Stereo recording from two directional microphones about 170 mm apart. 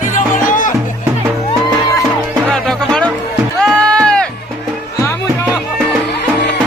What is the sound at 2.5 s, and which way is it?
Music, 5° left (ahead or behind).